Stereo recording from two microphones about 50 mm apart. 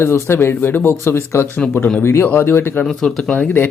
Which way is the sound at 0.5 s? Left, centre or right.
Left.